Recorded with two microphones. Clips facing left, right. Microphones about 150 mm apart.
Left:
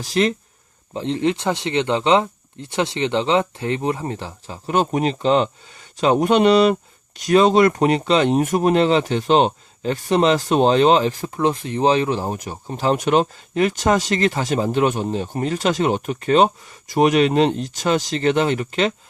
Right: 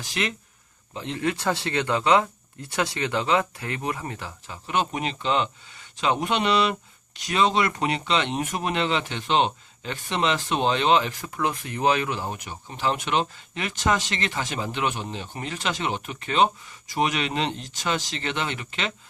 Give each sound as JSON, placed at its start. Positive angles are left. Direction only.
{"t": 0.0, "sound": "speech", "side_deg": 35}